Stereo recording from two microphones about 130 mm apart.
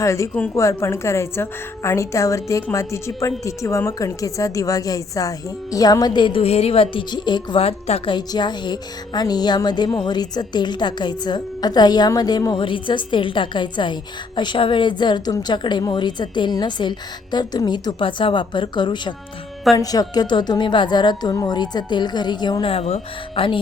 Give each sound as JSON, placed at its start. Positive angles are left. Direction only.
{"t": 0.0, "sound": "a woman's voice", "side_deg": 25}
{"t": 7.6, "sound": "speech", "side_deg": 50}
{"t": 8.1, "sound": "speech", "side_deg": 35}
{"t": 22.7, "sound": "speech", "side_deg": 50}